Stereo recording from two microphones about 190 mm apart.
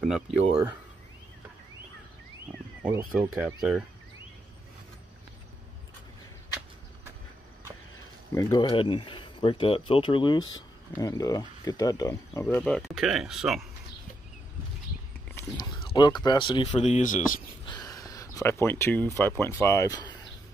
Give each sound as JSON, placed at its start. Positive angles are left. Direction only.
{"t": 0.0, "sound": "speech", "side_deg": 0}
{"t": 2.8, "sound": "speech", "side_deg": -10}
{"t": 8.4, "sound": "speech", "side_deg": 20}
{"t": 15.5, "sound": "speech", "side_deg": 20}
{"t": 17.6, "sound": "speech", "side_deg": 20}